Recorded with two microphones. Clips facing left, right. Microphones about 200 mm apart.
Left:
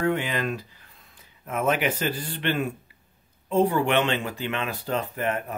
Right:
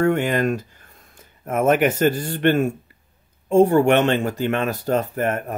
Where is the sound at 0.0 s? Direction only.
50° right (ahead or behind).